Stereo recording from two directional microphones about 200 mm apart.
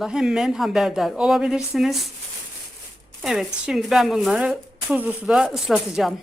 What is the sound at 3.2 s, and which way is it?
A woman's voice, centre (ahead or behind).